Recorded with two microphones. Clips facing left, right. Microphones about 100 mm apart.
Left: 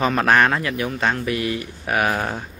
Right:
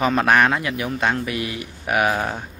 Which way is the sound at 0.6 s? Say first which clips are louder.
Even; 20° right (ahead or behind).